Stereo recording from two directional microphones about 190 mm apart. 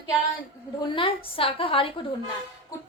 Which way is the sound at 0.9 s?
30° left (ahead or behind).